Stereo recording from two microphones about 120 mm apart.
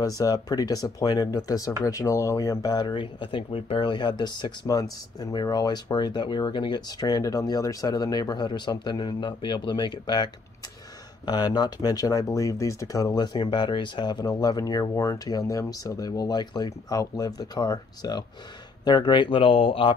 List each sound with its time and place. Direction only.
0.0 s speech: 30° left (ahead or behind); by 19.9 s 50° left (ahead or behind)